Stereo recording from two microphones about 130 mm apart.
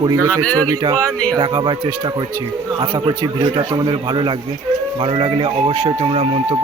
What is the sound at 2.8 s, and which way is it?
A man's voice, 40° right (ahead or behind).